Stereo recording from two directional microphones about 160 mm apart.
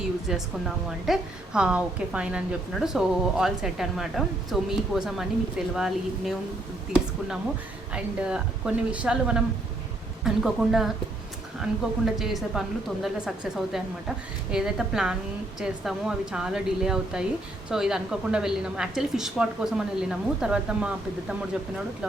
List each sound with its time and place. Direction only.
0.3 s a woman's voice: centre (ahead or behind)
7.9 s a woman's voice: 5° right (ahead or behind)